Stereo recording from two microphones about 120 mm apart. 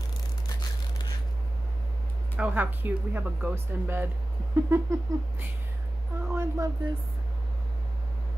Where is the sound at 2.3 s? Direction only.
10° right (ahead or behind).